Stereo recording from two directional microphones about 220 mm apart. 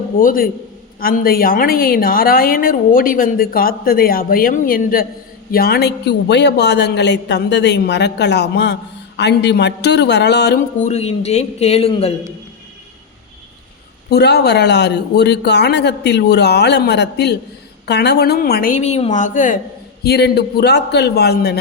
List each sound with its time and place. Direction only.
0.2 s a woman's voice: 40° left (ahead or behind)
10.8 s speech: 30° left (ahead or behind)
14.1 s a man's voice: 50° left (ahead or behind)
20.1 s a man's voice: 45° left (ahead or behind)